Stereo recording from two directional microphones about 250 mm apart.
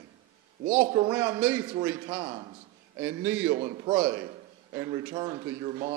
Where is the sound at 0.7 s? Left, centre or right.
Right.